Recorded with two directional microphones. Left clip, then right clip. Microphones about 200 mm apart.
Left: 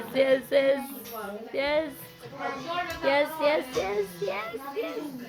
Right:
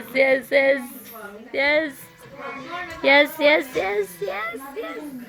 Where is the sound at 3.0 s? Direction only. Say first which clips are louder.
Right 9 dB; 30° right (ahead or behind).